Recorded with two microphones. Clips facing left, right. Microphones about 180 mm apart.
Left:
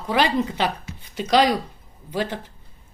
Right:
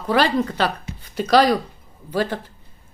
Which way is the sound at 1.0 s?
20° left (ahead or behind).